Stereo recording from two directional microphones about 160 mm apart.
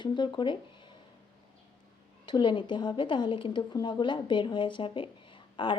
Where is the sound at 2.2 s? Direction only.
30° left (ahead or behind).